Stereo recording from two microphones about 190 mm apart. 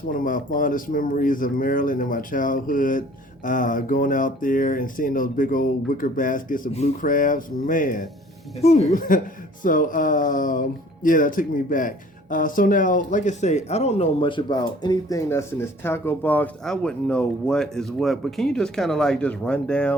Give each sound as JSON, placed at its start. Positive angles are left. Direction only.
{"t": 0.1, "sound": "speech", "side_deg": 45}